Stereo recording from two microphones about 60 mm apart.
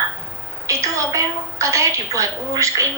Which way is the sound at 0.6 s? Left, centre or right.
Right.